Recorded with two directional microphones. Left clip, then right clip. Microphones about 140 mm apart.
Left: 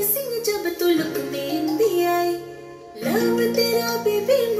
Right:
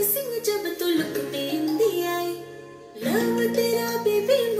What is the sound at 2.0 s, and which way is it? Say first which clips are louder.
Music: left 6 dB; 15° left (ahead or behind).